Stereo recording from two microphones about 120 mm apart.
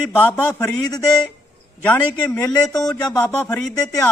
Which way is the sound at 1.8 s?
15° left (ahead or behind).